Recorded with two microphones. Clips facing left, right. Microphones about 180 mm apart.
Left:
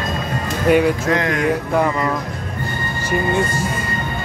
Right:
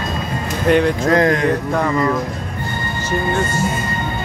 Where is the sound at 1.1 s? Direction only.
35° right (ahead or behind).